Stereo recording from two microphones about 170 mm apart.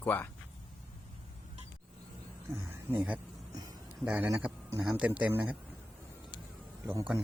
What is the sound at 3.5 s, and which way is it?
Music, 20° right (ahead or behind).